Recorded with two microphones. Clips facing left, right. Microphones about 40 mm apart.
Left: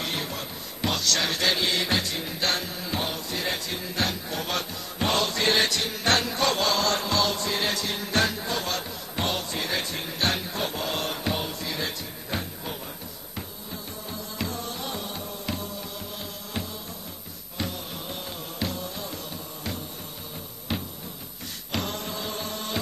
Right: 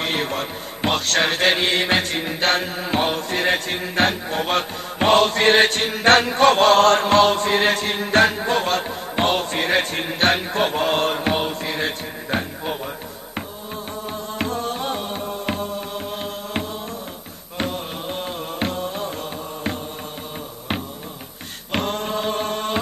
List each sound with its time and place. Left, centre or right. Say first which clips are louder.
0.0 s speech: right 8 dB; right
14.1 s music: right 7 dB; right
21.7 s mantra: right 8 dB; right